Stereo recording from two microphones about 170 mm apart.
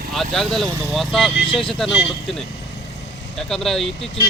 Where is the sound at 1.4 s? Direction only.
30° left (ahead or behind).